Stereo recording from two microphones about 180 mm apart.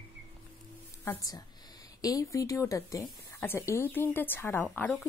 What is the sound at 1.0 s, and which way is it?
A woman's voice, 20° left (ahead or behind).